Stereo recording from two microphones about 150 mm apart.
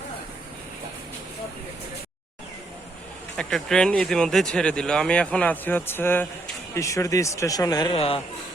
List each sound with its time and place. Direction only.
3.3 s speech: 5° left (ahead or behind); by 7.9 s 25° left (ahead or behind)
7.9 s speech: 40° left (ahead or behind)